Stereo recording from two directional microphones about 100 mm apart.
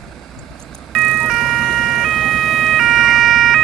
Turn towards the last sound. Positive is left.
turn(degrees=0)  # may be behind; listen again after turning